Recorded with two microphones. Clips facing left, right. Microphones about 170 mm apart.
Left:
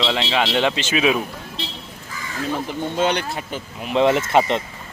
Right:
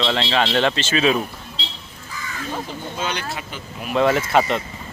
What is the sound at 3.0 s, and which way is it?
Speech, 60° left (ahead or behind).